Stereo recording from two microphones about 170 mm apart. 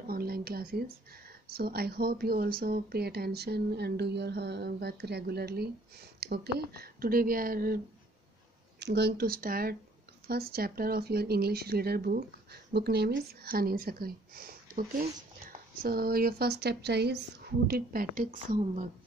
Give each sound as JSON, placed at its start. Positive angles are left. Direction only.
{"t": 0.0, "sound": "a sound", "side_deg": -60}
{"t": 1.5, "sound": "speech", "side_deg": -65}
{"t": 8.7, "sound": "speech", "side_deg": -80}